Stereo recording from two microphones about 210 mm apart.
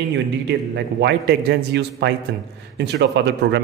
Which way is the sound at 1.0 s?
55° right (ahead or behind).